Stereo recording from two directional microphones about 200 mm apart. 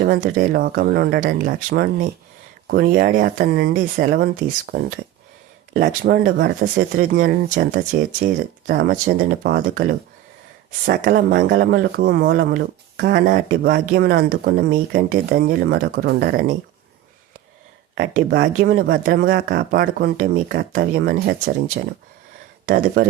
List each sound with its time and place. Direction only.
0.0 s speech: 45° right (ahead or behind)
6.0 s speech: 45° right (ahead or behind)
11.3 s speech: 55° right (ahead or behind)
18.1 s speech: 45° right (ahead or behind)